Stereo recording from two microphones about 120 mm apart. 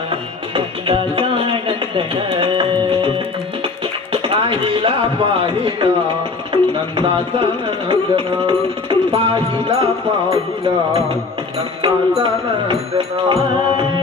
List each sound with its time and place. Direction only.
0.5 s music: 45° right (ahead or behind)
4.1 s a sound: 45° right (ahead or behind)
6.5 s music: 45° right (ahead or behind)
11.8 s music: 40° right (ahead or behind)
12.9 s music: 55° right (ahead or behind)